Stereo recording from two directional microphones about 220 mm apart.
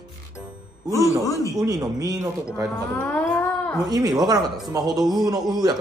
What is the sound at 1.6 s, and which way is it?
Speech, 15° right (ahead or behind).